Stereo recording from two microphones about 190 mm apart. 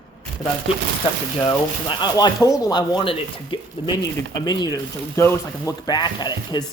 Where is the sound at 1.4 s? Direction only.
25° left (ahead or behind).